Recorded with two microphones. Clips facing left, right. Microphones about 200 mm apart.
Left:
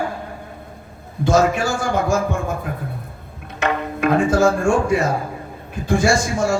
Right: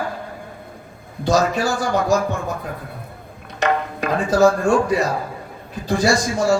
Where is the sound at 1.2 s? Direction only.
35° right (ahead or behind).